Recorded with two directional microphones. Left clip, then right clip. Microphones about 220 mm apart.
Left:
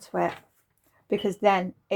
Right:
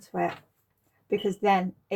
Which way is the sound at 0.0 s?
40° left (ahead or behind).